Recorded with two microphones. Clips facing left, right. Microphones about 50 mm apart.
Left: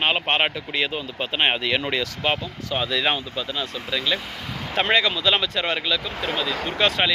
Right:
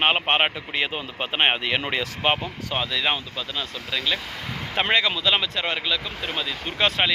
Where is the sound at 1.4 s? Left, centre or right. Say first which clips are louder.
Left 1 dB; centre.